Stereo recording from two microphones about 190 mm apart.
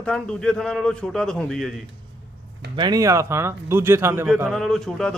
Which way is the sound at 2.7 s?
20° right (ahead or behind).